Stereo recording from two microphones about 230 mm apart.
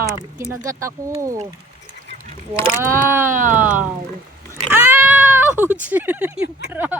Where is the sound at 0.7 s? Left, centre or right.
Centre.